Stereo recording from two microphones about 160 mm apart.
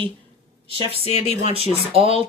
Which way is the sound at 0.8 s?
35° right (ahead or behind).